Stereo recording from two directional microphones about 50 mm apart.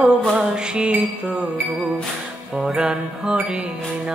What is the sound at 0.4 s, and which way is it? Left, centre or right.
Music, centre.